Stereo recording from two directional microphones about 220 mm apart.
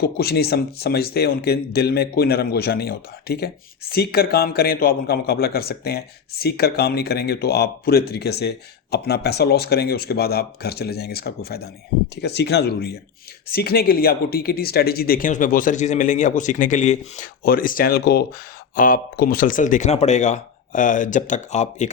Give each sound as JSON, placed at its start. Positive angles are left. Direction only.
{"t": 0.0, "sound": "speech", "side_deg": 45}